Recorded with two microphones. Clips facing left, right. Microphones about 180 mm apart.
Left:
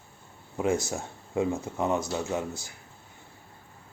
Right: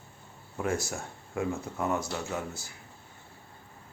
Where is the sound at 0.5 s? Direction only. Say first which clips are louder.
Left 4 dB; 20° left (ahead or behind).